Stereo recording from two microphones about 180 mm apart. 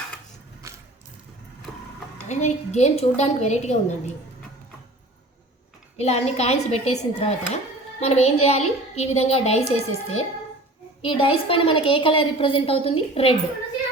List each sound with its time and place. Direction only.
0.6 s vehicle: 15° right (ahead or behind)
1.7 s vehicle: 5° left (ahead or behind)
2.2 s speech: 40° left (ahead or behind)
6.0 s a woman's voice: 35° left (ahead or behind)